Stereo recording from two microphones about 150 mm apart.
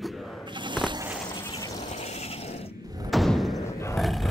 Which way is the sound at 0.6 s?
30° right (ahead or behind).